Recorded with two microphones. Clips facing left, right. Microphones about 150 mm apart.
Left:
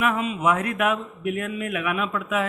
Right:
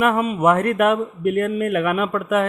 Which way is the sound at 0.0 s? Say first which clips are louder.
Right 6 dB; 50° right (ahead or behind).